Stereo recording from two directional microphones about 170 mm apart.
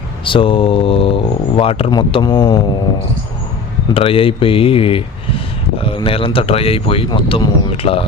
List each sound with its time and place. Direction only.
0.3 s speech: 30° left (ahead or behind)
3.9 s speech: 35° left (ahead or behind)